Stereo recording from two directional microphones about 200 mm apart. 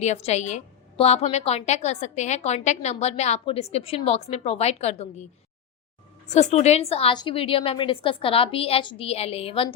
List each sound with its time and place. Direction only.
0.0 s a woman's voice: 30° left (ahead or behind)
6.3 s a woman's voice: 35° left (ahead or behind)